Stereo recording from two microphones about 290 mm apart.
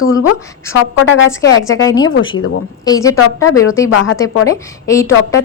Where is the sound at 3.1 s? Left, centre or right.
Left.